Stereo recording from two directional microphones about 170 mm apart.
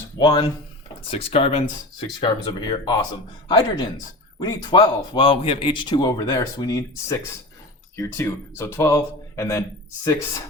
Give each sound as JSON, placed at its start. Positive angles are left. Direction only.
{"t": 0.2, "sound": "speech", "side_deg": 25}
{"t": 1.1, "sound": "a man's voice", "side_deg": 35}